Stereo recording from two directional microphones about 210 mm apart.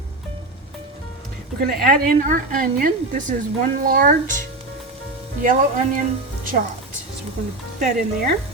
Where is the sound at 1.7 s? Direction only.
45° right (ahead or behind).